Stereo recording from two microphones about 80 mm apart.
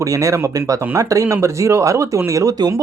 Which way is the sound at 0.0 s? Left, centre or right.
Right.